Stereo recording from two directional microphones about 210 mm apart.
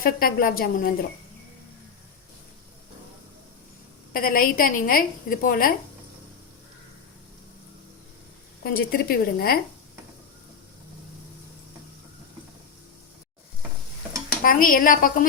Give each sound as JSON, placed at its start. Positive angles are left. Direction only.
{"t": 0.0, "sound": "a woman's voice", "side_deg": 45}
{"t": 4.1, "sound": "a woman's voice", "side_deg": 45}
{"t": 8.6, "sound": "a woman's voice", "side_deg": 45}
{"t": 14.4, "sound": "a woman's voice", "side_deg": 40}